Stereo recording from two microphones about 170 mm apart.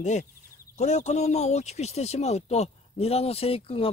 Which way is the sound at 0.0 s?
45° left (ahead or behind).